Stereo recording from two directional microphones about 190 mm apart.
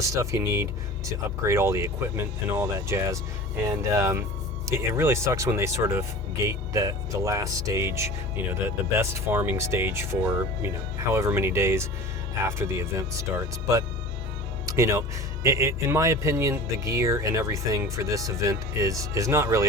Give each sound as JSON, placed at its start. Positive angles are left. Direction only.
{"t": 0.0, "sound": "speech", "side_deg": -15}
{"t": 14.8, "sound": "speech", "side_deg": -15}